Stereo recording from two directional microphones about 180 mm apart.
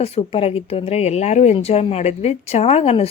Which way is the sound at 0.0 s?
30° left (ahead or behind).